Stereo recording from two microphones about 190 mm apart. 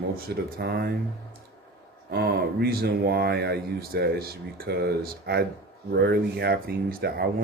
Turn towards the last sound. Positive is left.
turn(degrees=-55)  # may be behind; listen again after turning